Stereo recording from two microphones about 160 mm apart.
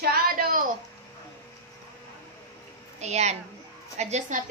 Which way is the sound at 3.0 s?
45° right (ahead or behind).